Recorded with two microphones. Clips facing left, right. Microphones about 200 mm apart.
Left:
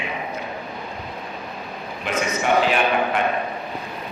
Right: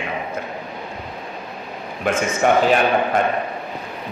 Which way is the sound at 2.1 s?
50° right (ahead or behind).